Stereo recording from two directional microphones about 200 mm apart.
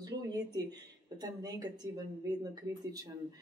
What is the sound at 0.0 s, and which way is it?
A woman's voice, 20° right (ahead or behind).